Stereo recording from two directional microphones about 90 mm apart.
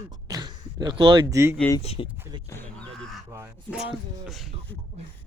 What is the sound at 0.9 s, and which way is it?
Speech, 70° right (ahead or behind).